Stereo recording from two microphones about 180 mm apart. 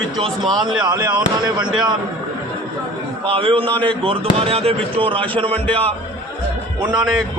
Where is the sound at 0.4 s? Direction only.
Centre (ahead or behind).